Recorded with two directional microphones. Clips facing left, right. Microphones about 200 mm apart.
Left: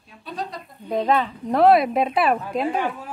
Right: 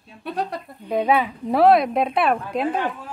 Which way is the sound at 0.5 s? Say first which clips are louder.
Right 5 dB; 60° right (ahead or behind).